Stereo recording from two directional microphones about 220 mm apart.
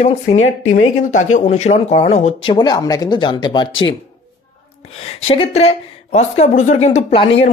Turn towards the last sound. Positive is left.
turn(degrees=25)  # may be behind; listen again after turning